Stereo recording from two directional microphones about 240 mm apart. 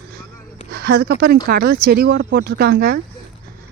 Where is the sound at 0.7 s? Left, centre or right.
Right.